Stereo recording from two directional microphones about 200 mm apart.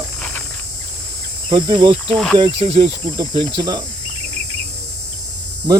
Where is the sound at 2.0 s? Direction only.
Centre (ahead or behind).